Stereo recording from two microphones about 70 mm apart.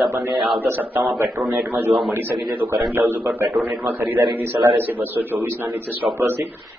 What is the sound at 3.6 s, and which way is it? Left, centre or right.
Speech, right.